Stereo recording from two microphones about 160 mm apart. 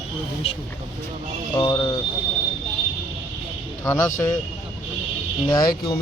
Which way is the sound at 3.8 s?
20° left (ahead or behind).